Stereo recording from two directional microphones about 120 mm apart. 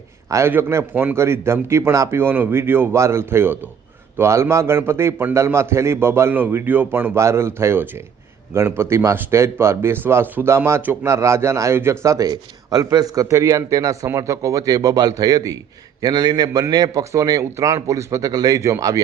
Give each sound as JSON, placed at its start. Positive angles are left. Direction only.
{"t": 0.3, "sound": "a man's voice", "side_deg": -20}